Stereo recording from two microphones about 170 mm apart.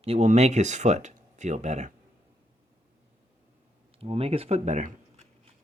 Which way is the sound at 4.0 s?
35° right (ahead or behind).